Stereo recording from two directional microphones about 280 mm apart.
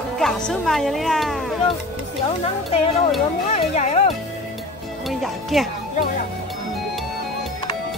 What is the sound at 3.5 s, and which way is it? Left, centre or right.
Music, left.